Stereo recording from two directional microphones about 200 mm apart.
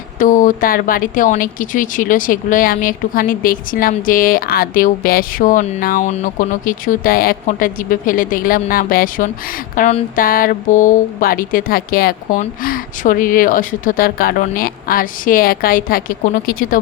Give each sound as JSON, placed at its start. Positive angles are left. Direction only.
{"t": 0.2, "sound": "a woman's voice", "side_deg": 40}